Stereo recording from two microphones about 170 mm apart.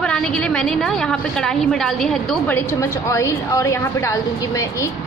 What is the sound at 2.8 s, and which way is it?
A woman's voice, 15° left (ahead or behind).